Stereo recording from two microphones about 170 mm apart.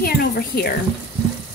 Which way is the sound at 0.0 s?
65° left (ahead or behind).